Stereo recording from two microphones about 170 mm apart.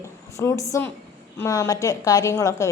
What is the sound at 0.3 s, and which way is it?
A woman's voice, 20° left (ahead or behind).